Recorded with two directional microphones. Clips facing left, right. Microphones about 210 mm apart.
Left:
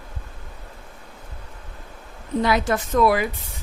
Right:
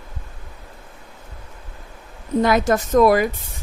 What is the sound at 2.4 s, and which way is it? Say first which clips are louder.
Speech: right 4 dB; 45° right (ahead or behind).